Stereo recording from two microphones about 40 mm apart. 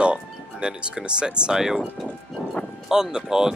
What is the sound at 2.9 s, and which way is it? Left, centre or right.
Speech, centre.